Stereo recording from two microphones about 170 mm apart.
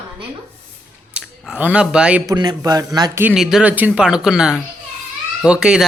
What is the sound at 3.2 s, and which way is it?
Speech, 5° right (ahead or behind).